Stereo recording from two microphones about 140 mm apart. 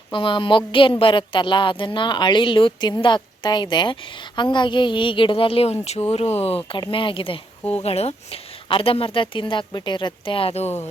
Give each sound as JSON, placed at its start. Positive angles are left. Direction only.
{"t": 0.1, "sound": "speech", "side_deg": 35}
{"t": 6.6, "sound": "speech", "side_deg": 35}